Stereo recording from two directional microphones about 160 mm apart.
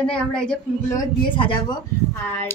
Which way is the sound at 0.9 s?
30° left (ahead or behind).